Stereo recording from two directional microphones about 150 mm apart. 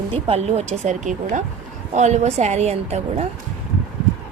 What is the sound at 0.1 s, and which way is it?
A woman's voice, 45° right (ahead or behind).